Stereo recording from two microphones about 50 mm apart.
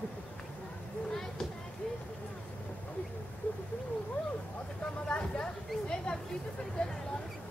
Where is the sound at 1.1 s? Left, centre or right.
Centre.